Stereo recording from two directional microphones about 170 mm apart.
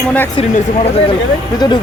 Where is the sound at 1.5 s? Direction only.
25° left (ahead or behind).